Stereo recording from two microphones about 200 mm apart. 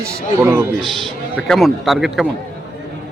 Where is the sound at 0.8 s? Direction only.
Centre (ahead or behind).